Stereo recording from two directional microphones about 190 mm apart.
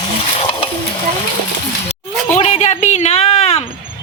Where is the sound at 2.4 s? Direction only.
35° left (ahead or behind).